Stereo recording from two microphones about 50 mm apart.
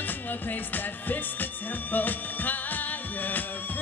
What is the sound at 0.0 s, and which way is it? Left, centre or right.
Music, left.